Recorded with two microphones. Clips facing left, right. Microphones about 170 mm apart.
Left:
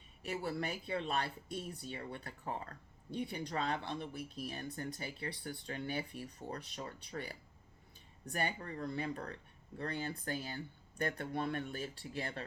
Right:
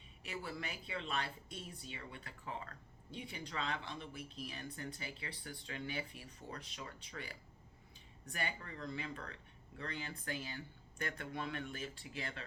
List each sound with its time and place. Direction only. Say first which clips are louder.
0.3 s speech: left 6 dB; 45° left (ahead or behind)